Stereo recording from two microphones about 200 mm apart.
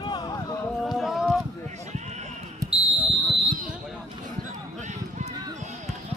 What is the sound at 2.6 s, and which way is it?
Basketball bounce, 15° right (ahead or behind).